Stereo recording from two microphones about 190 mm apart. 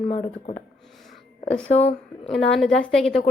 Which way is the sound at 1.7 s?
35° left (ahead or behind).